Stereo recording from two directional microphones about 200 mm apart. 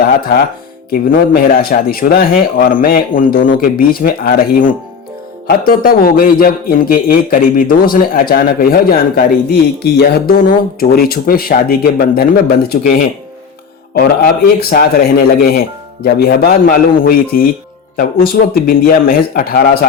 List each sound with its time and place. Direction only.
0.2 s a man's voice: 50° left (ahead or behind)
1.9 s a man's voice: 50° left (ahead or behind)